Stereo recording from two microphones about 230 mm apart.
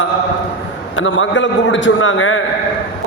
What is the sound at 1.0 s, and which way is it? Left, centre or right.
A man's voice, left.